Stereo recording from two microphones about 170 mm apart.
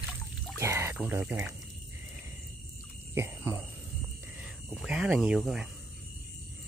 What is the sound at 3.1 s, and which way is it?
Speech, 15° right (ahead or behind).